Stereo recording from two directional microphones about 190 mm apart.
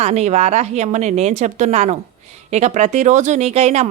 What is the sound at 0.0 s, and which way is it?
A woman's voice, 35° right (ahead or behind).